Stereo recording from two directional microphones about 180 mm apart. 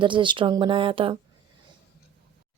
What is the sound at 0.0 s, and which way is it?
Speech, 25° right (ahead or behind).